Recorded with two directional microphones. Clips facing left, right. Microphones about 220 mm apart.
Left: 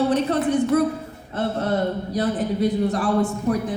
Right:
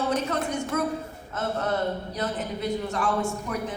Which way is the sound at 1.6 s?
35° left (ahead or behind).